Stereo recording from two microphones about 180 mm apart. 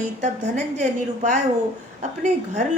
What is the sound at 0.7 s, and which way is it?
Speech, 45° right (ahead or behind).